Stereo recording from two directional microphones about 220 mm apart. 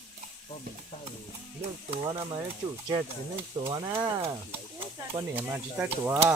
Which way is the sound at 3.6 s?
15° right (ahead or behind).